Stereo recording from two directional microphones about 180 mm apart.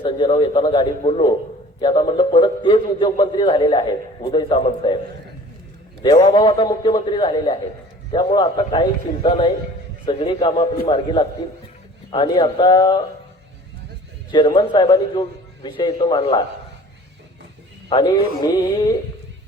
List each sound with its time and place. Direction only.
0.0 s a man's voice: 30° left (ahead or behind)
6.0 s a man's voice: 25° left (ahead or behind)
14.3 s a man's voice: 25° left (ahead or behind)
17.8 s a man's voice: 25° left (ahead or behind)